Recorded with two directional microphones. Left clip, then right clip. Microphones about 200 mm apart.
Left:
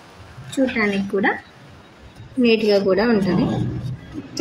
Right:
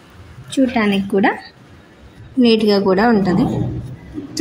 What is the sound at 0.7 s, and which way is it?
Speech, 40° right (ahead or behind).